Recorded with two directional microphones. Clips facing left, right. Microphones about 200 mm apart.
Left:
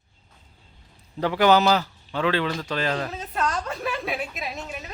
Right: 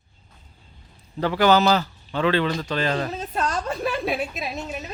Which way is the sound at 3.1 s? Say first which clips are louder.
Right 1 dB; 30° right (ahead or behind).